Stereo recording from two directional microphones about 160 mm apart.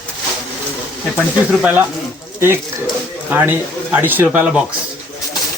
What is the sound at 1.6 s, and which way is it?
Speech, 10° right (ahead or behind).